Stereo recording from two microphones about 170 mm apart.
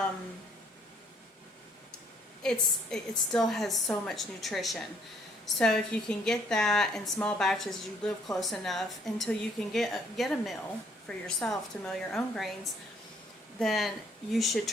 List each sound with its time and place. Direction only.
2.4 s a woman's voice: 5° left (ahead or behind)
13.6 s a woman's voice: centre (ahead or behind)